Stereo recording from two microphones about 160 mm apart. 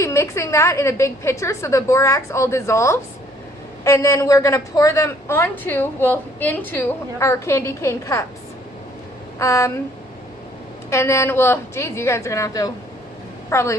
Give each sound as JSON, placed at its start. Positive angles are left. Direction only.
{"t": 0.0, "sound": "a woman's voice", "side_deg": 20}
{"t": 9.4, "sound": "a woman's voice", "side_deg": 20}
{"t": 10.8, "sound": "a woman's voice", "side_deg": 15}